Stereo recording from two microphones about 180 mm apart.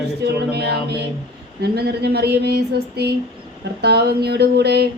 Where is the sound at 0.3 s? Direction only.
65° right (ahead or behind).